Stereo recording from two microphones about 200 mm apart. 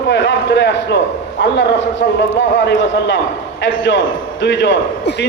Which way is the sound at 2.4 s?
65° left (ahead or behind).